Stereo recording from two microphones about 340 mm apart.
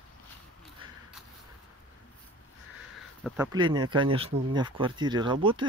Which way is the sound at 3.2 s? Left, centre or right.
Centre.